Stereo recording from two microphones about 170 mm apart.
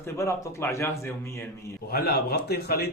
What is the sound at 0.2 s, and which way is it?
Speech, 15° left (ahead or behind).